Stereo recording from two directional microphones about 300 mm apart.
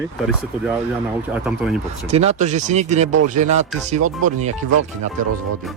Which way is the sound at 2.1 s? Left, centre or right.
Right.